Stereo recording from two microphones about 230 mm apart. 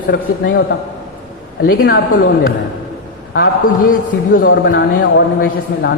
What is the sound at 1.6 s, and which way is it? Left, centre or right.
Speech, left.